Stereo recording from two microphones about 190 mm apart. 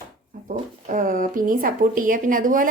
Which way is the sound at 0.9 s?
45° right (ahead or behind).